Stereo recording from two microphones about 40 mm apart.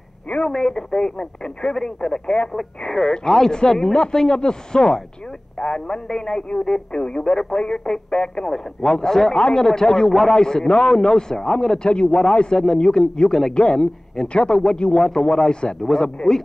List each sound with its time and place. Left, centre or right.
0.4 s a man's voice: centre
2.5 s a man's voice: centre; by 7.2 s left
7.2 s a man's voice: centre
11.8 s speech: left
12.1 s a man's voice: centre